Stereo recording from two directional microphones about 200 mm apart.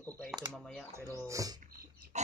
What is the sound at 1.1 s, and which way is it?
Speech, 15° right (ahead or behind).